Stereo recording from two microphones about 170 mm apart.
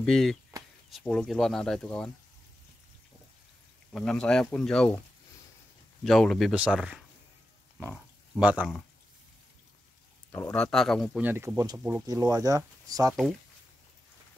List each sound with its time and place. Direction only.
0.0 s speech: 5° left (ahead or behind)
3.9 s speech: 5° left (ahead or behind)
6.0 s speech: centre (ahead or behind)
8.4 s speech: 10° right (ahead or behind)
10.3 s speech: 15° left (ahead or behind)
10.6 s speech: centre (ahead or behind)
11.1 s speech: 10° right (ahead or behind)